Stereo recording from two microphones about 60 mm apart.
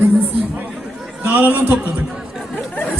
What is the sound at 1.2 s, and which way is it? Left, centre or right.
Speech, right.